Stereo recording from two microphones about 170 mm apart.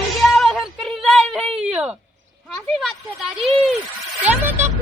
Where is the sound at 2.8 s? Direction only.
Centre (ahead or behind).